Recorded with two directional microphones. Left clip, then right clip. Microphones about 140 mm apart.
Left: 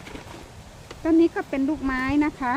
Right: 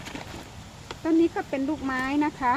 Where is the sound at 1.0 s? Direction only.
40° left (ahead or behind).